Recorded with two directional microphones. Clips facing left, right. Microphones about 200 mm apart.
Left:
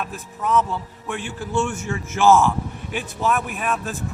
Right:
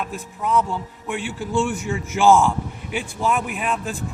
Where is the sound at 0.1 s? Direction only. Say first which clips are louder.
Left 1 dB; 15° right (ahead or behind).